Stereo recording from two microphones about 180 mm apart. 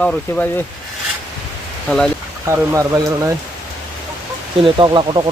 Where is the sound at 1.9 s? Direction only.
10° left (ahead or behind).